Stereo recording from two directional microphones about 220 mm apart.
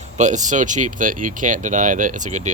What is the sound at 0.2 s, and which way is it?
Speech, 35° right (ahead or behind).